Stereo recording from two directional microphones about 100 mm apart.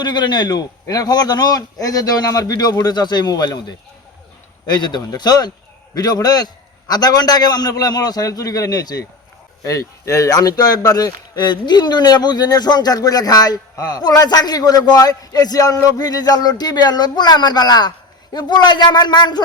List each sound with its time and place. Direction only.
0.0 s a man's voice: 50° left (ahead or behind)